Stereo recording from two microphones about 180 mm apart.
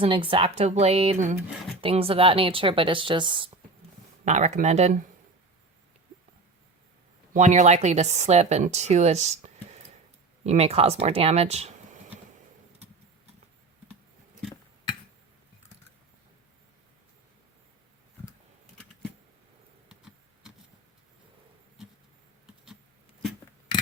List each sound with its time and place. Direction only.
0.0 s speech: 30° right (ahead or behind)
1.8 s speech: 30° right (ahead or behind)
4.3 s speech: 40° right (ahead or behind)
7.3 s speech: 40° right (ahead or behind)